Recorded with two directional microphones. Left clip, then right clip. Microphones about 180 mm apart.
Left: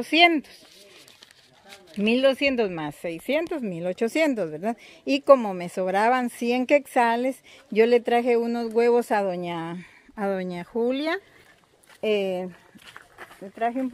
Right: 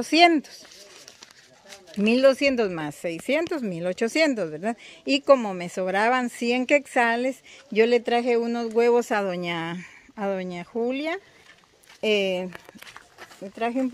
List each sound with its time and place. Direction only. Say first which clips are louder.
0.0 s speech: right 1 dB; 20° right (ahead or behind)
1.7 s speech: right 1 dB; 15° right (ahead or behind); by 9.2 s 10° left (ahead or behind)
9.2 s speech: even; 5° right (ahead or behind)
10.1 s speech: left 1 dB; 15° left (ahead or behind)
12.0 s speech: right 1 dB; 5° right (ahead or behind)
13.4 s speech: even; 15° right (ahead or behind)